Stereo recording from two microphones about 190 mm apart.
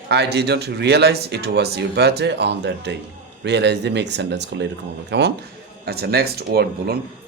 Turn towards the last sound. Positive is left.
turn(degrees=-55)  # may be behind; listen again after turning